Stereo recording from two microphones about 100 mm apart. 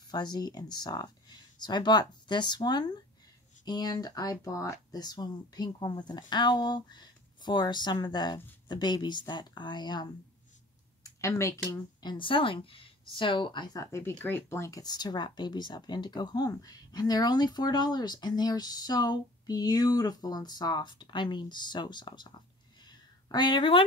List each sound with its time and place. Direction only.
0.1 s speech: 45° left (ahead or behind)
11.1 s speech: 30° left (ahead or behind)
12.0 s speech: 50° left (ahead or behind)
13.7 s speech: 25° left (ahead or behind)
14.8 s a woman's voice: 40° left (ahead or behind)